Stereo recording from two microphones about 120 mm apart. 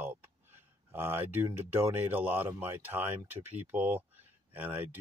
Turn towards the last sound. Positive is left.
turn(degrees=-15)  # may be behind; listen again after turning